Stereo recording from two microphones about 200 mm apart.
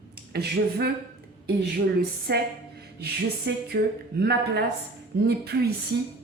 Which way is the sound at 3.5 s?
60° right (ahead or behind).